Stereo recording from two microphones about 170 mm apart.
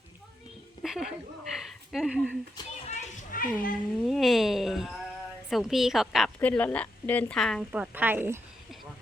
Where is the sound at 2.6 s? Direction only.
25° left (ahead or behind).